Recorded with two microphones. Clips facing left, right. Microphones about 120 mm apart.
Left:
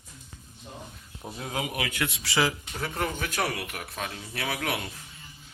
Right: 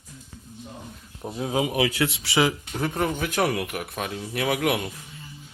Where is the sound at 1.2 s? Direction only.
20° right (ahead or behind).